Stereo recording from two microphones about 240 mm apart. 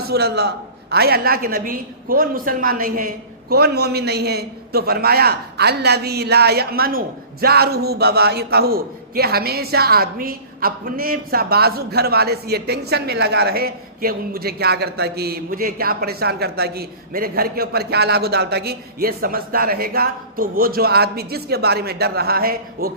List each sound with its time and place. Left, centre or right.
0.1 s a man's voice: right